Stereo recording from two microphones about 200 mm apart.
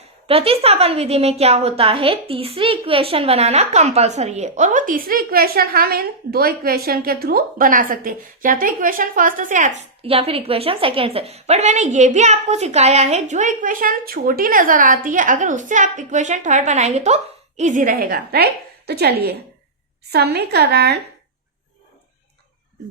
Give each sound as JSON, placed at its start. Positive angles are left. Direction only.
{"t": 0.3, "sound": "a woman's voice", "side_deg": -30}